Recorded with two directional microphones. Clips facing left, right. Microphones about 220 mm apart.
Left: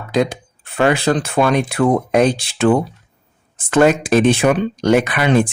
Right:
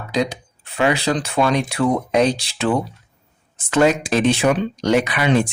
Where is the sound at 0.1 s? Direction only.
55° left (ahead or behind).